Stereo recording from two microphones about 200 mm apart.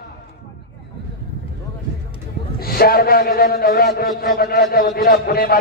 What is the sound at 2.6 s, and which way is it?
A man's voice, 50° left (ahead or behind).